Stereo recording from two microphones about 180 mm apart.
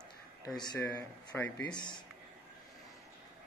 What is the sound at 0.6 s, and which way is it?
Speech, 20° left (ahead or behind).